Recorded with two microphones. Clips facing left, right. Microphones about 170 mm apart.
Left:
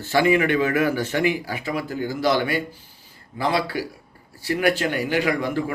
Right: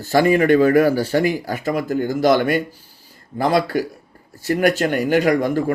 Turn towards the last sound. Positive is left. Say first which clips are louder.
# right 6 dB
turn(degrees=-45)  # may be behind; listen again after turning